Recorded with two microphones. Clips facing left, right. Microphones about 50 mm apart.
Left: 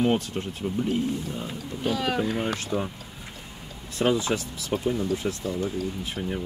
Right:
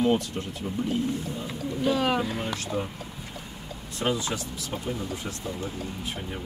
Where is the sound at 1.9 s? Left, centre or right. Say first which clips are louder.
Right 2 dB; right.